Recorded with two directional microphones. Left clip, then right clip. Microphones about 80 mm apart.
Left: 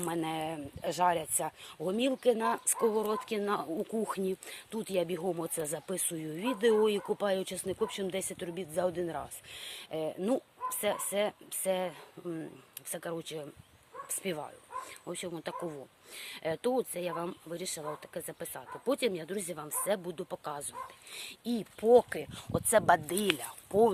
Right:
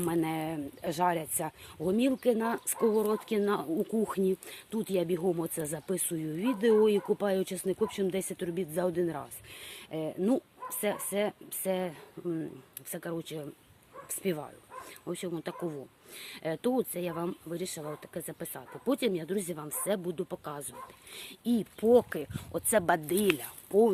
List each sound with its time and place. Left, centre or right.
0.0 s speech: centre
1.4 s speech: centre
8.4 s speech: centre
9.2 s speech: left